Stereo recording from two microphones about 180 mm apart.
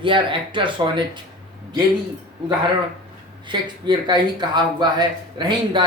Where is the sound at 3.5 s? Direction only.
25° right (ahead or behind).